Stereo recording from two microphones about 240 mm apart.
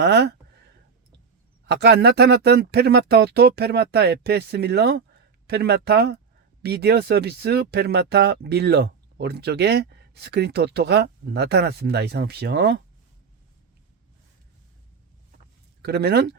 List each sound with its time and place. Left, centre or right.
0.0 s speech: right
1.6 s speech: right
15.8 s speech: right